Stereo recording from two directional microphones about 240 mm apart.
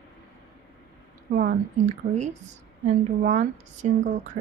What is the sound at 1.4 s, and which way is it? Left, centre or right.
Speech, right.